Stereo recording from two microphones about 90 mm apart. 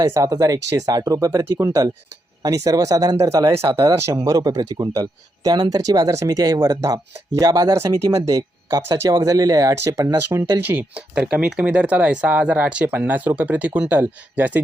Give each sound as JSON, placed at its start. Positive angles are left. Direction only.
{"t": 0.0, "sound": "speech", "side_deg": -35}
{"t": 1.0, "sound": "speech", "side_deg": -30}
{"t": 10.7, "sound": "speech", "side_deg": -20}